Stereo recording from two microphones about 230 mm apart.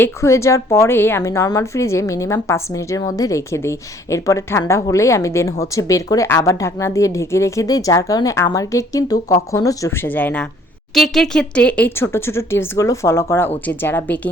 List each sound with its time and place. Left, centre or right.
0.0 s a woman's voice: centre